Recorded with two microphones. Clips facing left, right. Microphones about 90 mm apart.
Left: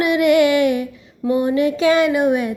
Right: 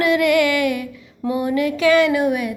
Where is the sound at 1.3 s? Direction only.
25° left (ahead or behind).